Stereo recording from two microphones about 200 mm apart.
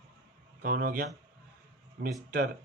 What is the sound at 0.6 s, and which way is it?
Speech, 50° right (ahead or behind).